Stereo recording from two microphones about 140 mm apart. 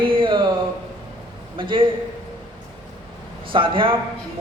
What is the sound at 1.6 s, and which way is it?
Speech, 35° right (ahead or behind).